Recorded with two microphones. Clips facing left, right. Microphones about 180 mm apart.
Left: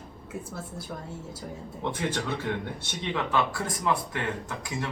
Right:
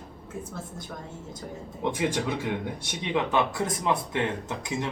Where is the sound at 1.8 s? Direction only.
15° right (ahead or behind).